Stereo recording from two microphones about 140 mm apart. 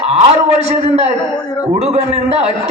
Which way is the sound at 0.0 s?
45° right (ahead or behind).